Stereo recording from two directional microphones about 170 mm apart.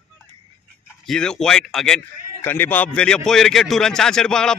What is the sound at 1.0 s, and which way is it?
A man's voice, 5° left (ahead or behind).